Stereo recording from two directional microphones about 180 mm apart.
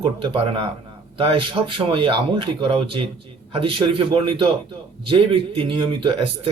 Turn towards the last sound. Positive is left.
turn(degrees=-30)  # may be behind; listen again after turning